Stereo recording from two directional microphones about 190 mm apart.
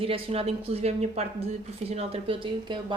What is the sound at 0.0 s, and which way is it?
Speech, 30° right (ahead or behind).